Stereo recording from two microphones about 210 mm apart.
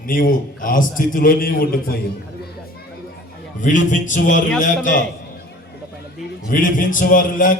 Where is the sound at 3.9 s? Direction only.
35° left (ahead or behind).